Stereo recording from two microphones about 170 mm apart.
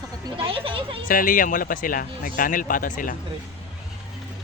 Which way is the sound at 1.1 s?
55° left (ahead or behind).